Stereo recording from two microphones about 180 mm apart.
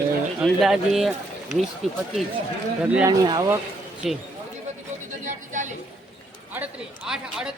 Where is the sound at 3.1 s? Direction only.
20° right (ahead or behind).